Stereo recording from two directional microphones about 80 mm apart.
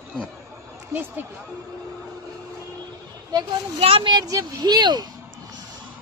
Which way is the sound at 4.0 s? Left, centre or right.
Right.